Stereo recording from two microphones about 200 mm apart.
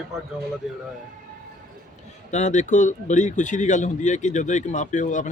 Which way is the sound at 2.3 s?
35° left (ahead or behind).